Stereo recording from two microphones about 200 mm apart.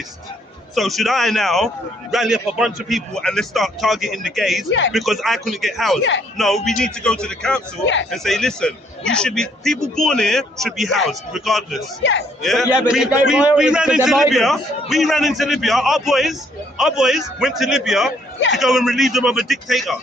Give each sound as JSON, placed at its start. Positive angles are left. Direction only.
{"t": 0.8, "sound": "a man's voice", "side_deg": 0}
{"t": 6.0, "sound": "speech", "side_deg": 65}
{"t": 6.3, "sound": "a man's voice", "side_deg": 0}
{"t": 18.3, "sound": "a man's voice", "side_deg": 65}
{"t": 18.6, "sound": "a man's voice", "side_deg": 0}